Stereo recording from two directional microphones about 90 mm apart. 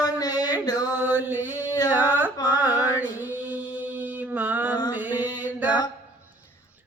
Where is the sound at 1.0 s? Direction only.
20° right (ahead or behind).